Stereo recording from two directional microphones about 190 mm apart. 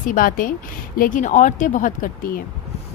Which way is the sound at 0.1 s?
45° left (ahead or behind).